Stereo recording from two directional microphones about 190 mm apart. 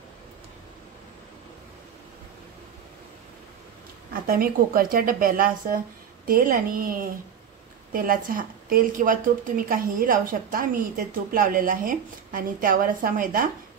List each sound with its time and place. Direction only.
4.1 s a woman's voice: 50° right (ahead or behind)